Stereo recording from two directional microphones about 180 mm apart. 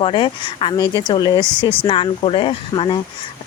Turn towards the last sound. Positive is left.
turn(degrees=25)  # may be behind; listen again after turning